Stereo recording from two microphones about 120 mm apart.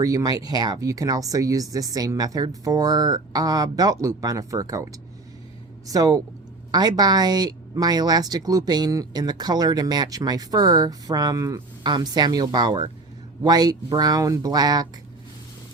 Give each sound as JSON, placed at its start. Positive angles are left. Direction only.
{"t": 0.0, "sound": "a woman's voice", "side_deg": -30}